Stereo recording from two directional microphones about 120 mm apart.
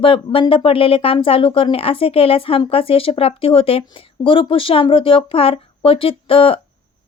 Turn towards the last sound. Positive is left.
turn(degrees=50)  # may be behind; listen again after turning